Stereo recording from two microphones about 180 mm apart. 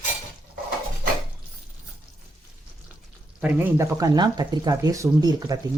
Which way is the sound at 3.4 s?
10° right (ahead or behind).